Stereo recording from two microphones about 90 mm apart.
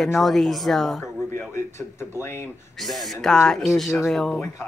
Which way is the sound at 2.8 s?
Centre (ahead or behind).